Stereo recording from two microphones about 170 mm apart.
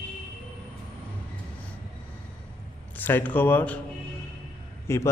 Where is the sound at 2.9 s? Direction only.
10° left (ahead or behind).